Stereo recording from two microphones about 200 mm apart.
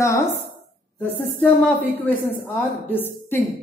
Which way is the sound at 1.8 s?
10° left (ahead or behind).